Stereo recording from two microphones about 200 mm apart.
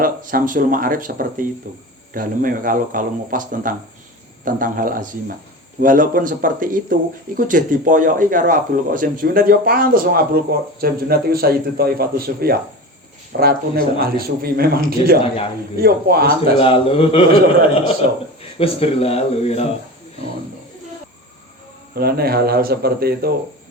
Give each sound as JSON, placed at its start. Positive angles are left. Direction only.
{"t": 0.0, "sound": "speech", "side_deg": -45}
{"t": 16.6, "sound": "a man's voice", "side_deg": 30}
{"t": 18.6, "sound": "speech", "side_deg": 30}
{"t": 21.9, "sound": "speech", "side_deg": -50}